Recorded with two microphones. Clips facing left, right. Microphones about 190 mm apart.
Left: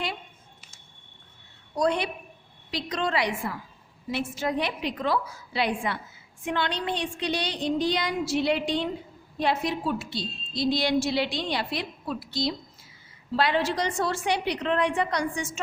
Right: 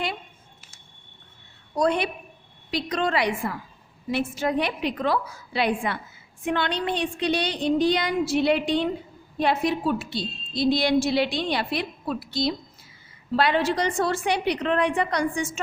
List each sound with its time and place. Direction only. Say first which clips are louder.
1.8 s a woman's voice: right 2 dB; 55° right (ahead or behind)